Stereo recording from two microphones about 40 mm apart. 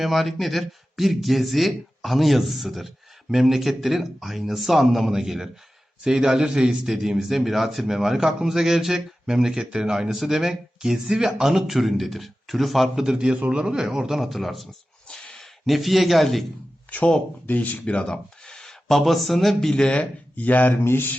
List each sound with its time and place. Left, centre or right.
0.0 s speech: centre
10.2 s speech: centre
11.5 s speech: centre
13.1 s a man's voice: centre
13.3 s a man's voice: right
14.1 s speech: centre
15.1 s a sound: centre
15.6 s speech: centre
17.4 s speech: left
17.8 s speech: left
18.4 s a sound: centre
18.9 s speech: centre
19.9 s speech: left
20.8 s speech: left